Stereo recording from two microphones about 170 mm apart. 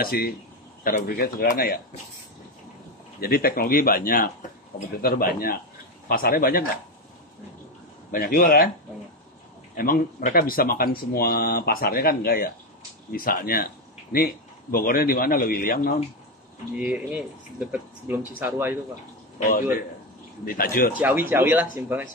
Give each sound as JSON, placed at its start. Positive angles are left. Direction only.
{"t": 0.0, "sound": "speech", "side_deg": 60}
{"t": 3.2, "sound": "speech", "side_deg": 60}
{"t": 8.1, "sound": "speech", "side_deg": 60}
{"t": 9.8, "sound": "speech", "side_deg": 55}
{"t": 16.7, "sound": "speech", "side_deg": -5}
{"t": 20.4, "sound": "speech", "side_deg": 60}
{"t": 21.0, "sound": "speech", "side_deg": -10}